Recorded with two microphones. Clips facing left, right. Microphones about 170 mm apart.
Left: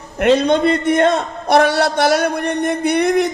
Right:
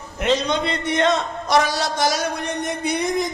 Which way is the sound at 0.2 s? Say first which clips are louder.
Left 7 dB; 55° left (ahead or behind).